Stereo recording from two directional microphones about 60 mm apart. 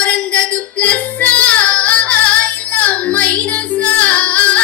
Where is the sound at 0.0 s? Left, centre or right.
Left.